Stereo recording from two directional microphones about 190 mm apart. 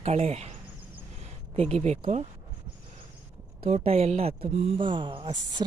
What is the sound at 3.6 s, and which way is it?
Speech, 30° right (ahead or behind).